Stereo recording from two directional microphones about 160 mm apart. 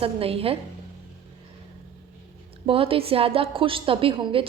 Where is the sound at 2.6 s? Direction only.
35° right (ahead or behind).